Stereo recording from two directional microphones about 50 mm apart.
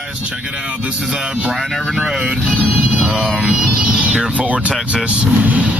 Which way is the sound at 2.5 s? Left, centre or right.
Right.